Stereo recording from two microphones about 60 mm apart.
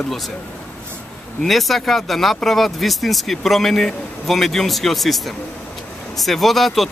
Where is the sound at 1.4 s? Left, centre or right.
Centre.